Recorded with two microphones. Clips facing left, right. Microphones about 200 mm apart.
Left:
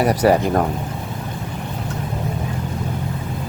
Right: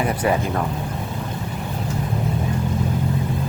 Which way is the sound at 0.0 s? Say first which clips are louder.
Left 5 dB; 40° left (ahead or behind).